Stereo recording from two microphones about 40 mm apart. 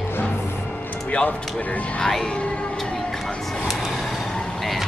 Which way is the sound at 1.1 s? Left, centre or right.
Left.